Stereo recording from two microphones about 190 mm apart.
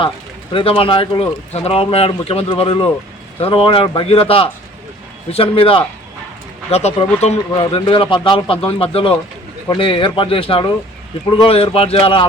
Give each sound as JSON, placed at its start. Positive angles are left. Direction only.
{"t": 0.5, "sound": "speech", "side_deg": 30}